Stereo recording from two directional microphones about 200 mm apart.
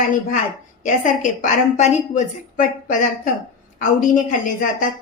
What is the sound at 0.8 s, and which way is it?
A woman's voice, 40° left (ahead or behind).